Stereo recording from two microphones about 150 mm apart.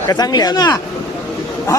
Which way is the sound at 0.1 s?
25° left (ahead or behind).